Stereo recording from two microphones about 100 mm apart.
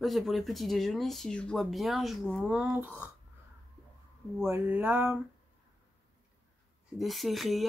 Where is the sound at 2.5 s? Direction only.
10° right (ahead or behind).